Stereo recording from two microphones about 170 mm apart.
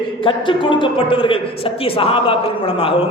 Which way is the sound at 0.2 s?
30° left (ahead or behind).